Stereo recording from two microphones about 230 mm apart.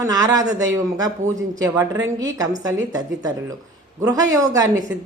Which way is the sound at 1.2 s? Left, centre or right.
Right.